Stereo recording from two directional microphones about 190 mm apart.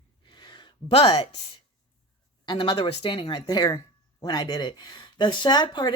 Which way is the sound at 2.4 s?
25° left (ahead or behind).